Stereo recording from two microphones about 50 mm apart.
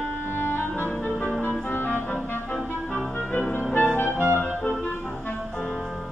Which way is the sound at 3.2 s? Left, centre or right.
Left.